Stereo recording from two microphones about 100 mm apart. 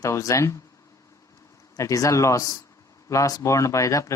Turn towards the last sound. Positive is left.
turn(degrees=30)  # may be behind; listen again after turning